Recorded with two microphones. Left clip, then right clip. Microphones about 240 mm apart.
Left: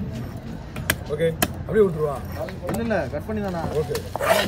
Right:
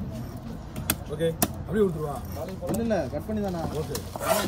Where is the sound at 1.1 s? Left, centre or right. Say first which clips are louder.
Left 4 dB; left.